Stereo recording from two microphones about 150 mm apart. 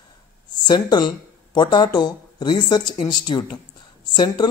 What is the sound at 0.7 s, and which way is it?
Speech, 30° left (ahead or behind).